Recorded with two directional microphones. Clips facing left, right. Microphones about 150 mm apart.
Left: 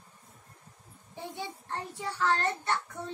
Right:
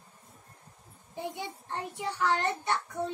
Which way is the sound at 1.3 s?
15° right (ahead or behind).